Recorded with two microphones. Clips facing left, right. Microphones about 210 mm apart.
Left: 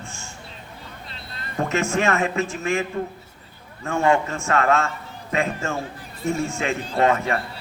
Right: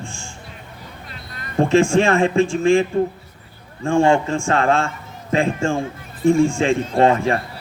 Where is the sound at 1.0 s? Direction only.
30° left (ahead or behind).